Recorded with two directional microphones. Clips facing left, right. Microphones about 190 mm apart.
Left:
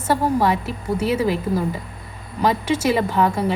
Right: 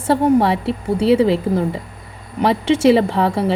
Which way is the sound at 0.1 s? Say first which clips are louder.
Right 5 dB; 30° right (ahead or behind).